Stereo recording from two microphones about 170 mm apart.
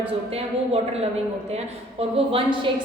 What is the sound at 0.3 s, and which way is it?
A woman's voice, 35° right (ahead or behind).